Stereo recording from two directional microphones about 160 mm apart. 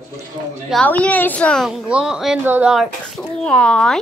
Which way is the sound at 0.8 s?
10° left (ahead or behind).